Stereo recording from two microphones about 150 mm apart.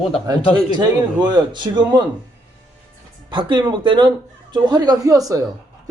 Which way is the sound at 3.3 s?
35° right (ahead or behind).